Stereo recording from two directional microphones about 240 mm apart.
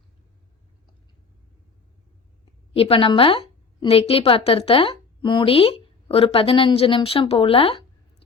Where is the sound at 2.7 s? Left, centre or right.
Left.